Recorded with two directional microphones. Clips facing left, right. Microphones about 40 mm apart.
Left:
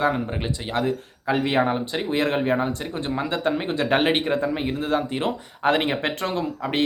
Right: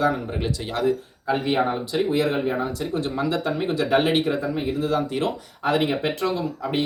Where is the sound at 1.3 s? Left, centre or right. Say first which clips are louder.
Left 1 dB; left.